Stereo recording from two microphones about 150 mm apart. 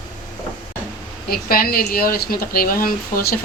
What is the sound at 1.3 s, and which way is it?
Speech, 80° left.